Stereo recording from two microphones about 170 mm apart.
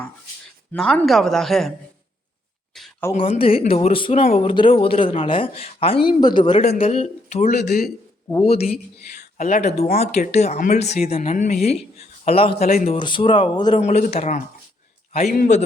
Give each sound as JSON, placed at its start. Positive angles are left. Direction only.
{"t": 0.7, "sound": "speech", "side_deg": 5}
{"t": 2.7, "sound": "speech", "side_deg": 0}
{"t": 3.1, "sound": "speech", "side_deg": 35}
{"t": 6.6, "sound": "speech", "side_deg": 40}
{"t": 13.7, "sound": "speech", "side_deg": 40}
{"t": 15.4, "sound": "speech", "side_deg": 45}